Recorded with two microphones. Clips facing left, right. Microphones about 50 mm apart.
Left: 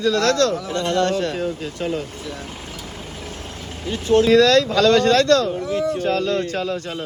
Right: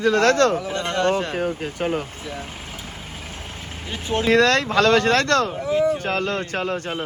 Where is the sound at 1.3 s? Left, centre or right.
Right.